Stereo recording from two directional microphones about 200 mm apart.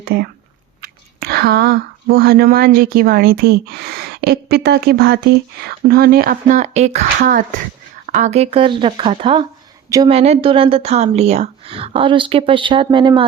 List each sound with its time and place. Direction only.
0.0 s speech: 50° right (ahead or behind); by 13.2 s 25° right (ahead or behind)